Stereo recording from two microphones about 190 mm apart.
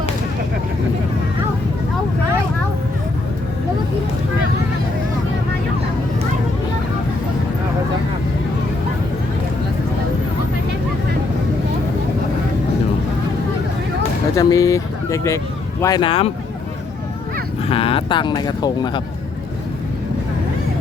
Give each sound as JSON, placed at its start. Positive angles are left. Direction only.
{"t": 14.3, "sound": "a sound", "side_deg": 15}
{"t": 15.8, "sound": "speech", "side_deg": 20}
{"t": 17.7, "sound": "speech", "side_deg": 30}